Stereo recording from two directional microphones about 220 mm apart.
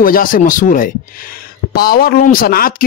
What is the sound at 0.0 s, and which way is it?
Speech, 40° left (ahead or behind).